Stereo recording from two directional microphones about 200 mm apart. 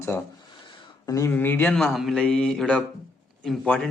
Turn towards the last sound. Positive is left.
turn(degrees=5)  # may be behind; listen again after turning